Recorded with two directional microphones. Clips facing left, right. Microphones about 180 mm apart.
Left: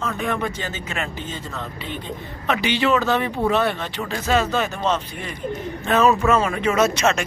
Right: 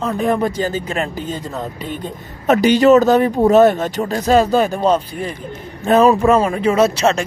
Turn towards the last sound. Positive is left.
turn(degrees=-35)  # may be behind; listen again after turning